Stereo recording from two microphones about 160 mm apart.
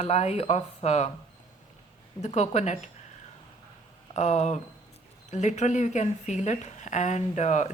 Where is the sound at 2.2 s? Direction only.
45° left (ahead or behind).